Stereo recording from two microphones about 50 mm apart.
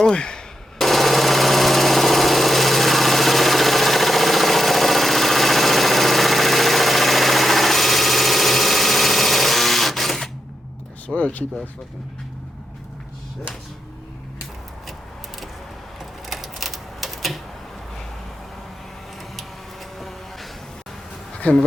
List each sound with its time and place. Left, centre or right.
0.0 s speech: centre
0.8 s a sound: centre
11.1 s speech: left
16.0 s typewriter: centre
19.4 s a sound: centre
21.3 s bee: left